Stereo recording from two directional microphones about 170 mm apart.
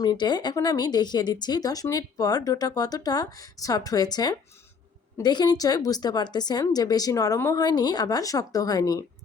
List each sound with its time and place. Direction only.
0.0 s speech: 25° left (ahead or behind)